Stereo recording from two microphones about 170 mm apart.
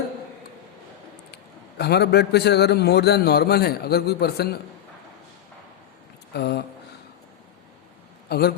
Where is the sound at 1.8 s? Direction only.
75° left (ahead or behind).